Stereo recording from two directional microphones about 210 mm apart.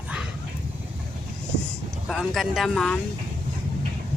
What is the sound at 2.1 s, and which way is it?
Speech, centre (ahead or behind).